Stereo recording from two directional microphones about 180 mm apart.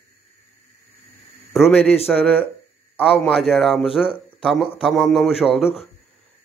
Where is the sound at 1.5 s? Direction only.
Centre (ahead or behind).